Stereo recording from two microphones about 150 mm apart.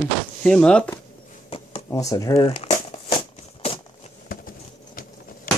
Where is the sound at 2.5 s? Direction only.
45° left (ahead or behind).